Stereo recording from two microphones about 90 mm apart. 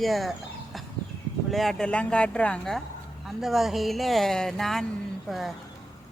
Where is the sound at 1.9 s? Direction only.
15° left (ahead or behind).